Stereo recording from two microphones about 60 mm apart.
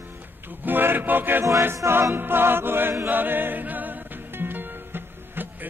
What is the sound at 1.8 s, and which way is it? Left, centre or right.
Music, right.